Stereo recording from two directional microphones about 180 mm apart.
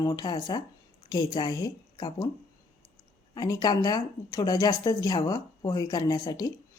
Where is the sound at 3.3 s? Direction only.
20° left (ahead or behind).